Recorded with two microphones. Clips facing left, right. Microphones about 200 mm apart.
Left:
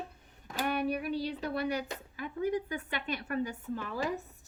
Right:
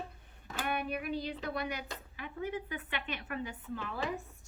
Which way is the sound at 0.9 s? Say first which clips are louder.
Left 3 dB; 35° left (ahead or behind).